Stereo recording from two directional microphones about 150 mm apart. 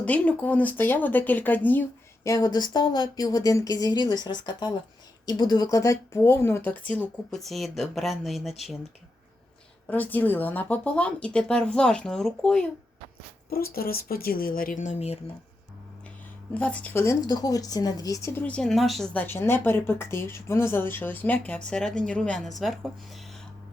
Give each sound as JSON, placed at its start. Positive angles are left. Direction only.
{"t": 0.0, "sound": "a woman's voice", "side_deg": 10}
{"t": 2.2, "sound": "speech", "side_deg": 25}
{"t": 9.8, "sound": "a woman's voice", "side_deg": 10}
{"t": 13.5, "sound": "speech", "side_deg": 90}
{"t": 16.6, "sound": "a woman's voice", "side_deg": 10}